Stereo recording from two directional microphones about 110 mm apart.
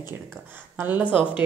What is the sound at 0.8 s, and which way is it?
Speech, 15° right (ahead or behind).